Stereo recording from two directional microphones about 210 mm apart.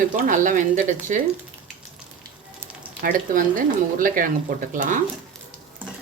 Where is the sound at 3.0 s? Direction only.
40° right (ahead or behind).